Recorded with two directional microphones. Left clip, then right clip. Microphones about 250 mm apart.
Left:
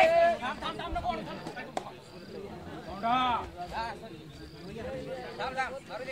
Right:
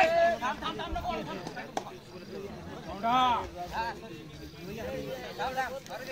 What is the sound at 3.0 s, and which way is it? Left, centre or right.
Speech, centre.